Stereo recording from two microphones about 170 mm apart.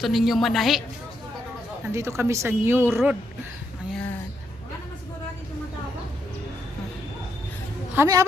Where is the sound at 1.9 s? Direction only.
15° right (ahead or behind).